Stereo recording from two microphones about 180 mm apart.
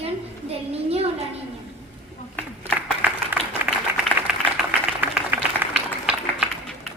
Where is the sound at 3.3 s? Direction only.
10° right (ahead or behind).